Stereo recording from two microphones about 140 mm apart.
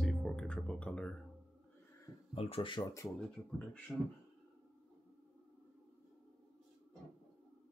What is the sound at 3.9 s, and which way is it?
Speech, centre (ahead or behind).